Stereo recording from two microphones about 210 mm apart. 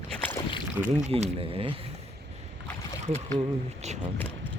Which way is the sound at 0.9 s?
30° right (ahead or behind).